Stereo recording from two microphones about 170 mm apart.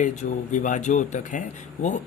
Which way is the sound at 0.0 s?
45° left (ahead or behind).